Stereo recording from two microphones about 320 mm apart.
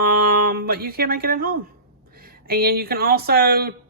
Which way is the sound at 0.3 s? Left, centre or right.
Right.